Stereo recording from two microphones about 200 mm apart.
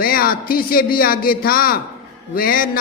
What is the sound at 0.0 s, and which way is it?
A man's voice, 45° left (ahead or behind).